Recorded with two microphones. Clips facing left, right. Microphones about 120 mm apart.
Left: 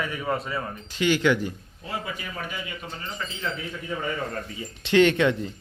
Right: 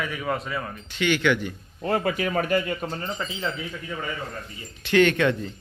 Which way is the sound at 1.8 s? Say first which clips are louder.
Right 9 dB; 65° right (ahead or behind).